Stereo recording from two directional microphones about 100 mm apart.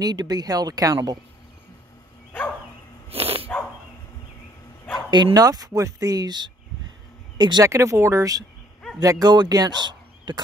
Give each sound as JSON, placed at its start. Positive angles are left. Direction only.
{"t": 0.0, "sound": "speech", "side_deg": -45}
{"t": 3.1, "sound": "dog", "side_deg": -75}
{"t": 5.1, "sound": "speech", "side_deg": -45}
{"t": 7.6, "sound": "speech", "side_deg": -30}